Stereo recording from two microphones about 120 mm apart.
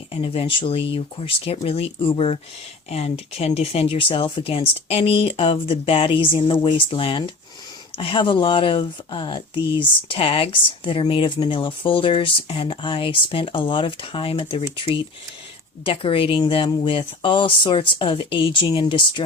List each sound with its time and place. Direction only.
0.1 s speech: 50° left (ahead or behind)